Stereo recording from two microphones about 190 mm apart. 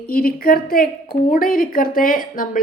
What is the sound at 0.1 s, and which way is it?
A woman's voice, 50° left (ahead or behind).